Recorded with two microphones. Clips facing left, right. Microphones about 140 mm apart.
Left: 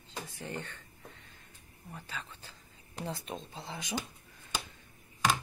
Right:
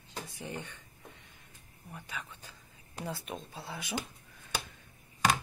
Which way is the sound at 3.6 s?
15° left (ahead or behind).